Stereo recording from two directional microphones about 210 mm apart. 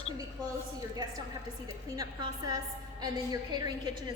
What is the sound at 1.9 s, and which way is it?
A woman's voice, 20° right (ahead or behind).